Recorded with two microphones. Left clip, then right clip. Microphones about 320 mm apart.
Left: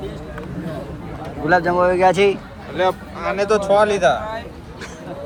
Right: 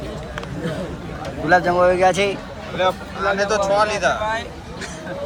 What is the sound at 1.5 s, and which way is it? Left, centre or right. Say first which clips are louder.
Speech: right 1 dB; centre.